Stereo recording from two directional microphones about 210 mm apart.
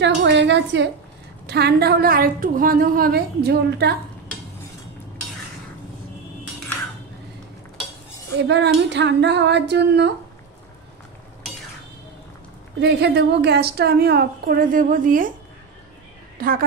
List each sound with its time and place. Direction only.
0.0 s a woman's voice: 60° right (ahead or behind)
8.4 s female singing: 55° right (ahead or behind)
12.8 s a woman's voice: 50° right (ahead or behind)
16.3 s a woman's voice: 45° right (ahead or behind)